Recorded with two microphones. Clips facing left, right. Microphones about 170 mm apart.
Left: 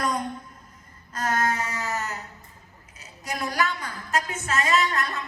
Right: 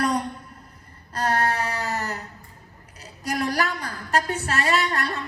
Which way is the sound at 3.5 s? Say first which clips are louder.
Right 1 dB; 35° right (ahead or behind).